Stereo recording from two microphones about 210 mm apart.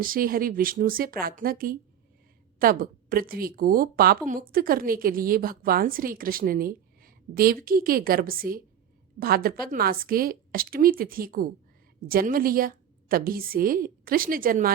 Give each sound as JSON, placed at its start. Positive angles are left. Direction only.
{"t": 0.0, "sound": "a woman's voice", "side_deg": -45}